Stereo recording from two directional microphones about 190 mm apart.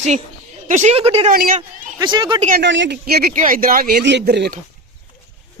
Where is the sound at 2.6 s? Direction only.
70° right (ahead or behind).